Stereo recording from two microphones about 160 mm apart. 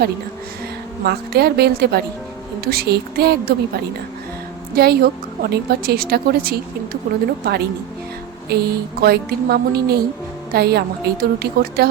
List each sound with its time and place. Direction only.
1.0 s speech: 80° right
2.6 s a woman's voice: 70° right (ahead or behind)
4.7 s a woman's voice: 75° right (ahead or behind)
7.4 s speech: 90° right
8.4 s a woman's voice: 80° right